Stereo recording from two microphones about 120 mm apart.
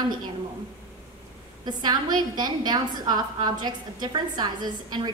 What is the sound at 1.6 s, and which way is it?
A woman's voice, 35° right (ahead or behind).